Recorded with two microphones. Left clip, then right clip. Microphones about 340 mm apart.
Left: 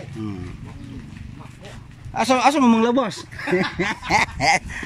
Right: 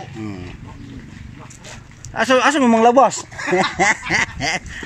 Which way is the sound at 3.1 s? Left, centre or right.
Right.